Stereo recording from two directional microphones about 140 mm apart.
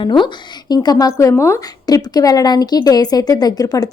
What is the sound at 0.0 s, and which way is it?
A woman's voice, 35° left (ahead or behind).